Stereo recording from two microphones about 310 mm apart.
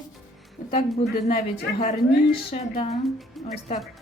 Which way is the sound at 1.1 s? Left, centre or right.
Left.